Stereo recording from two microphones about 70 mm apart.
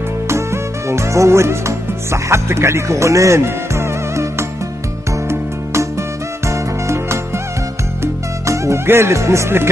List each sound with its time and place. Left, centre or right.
0.3 s music: right